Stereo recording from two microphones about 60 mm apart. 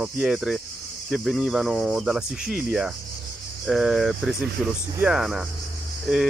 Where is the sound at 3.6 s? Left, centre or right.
Centre.